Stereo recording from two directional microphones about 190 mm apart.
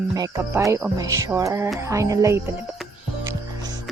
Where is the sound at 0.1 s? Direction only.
20° right (ahead or behind).